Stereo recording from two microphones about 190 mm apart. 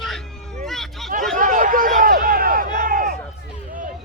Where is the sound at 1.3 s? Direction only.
45° right (ahead or behind).